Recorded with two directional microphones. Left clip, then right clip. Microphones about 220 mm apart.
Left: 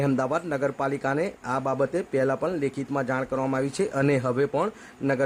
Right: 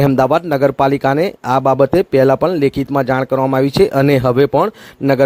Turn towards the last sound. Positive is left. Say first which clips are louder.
# right 11 dB
turn(degrees=-25)  # may be behind; listen again after turning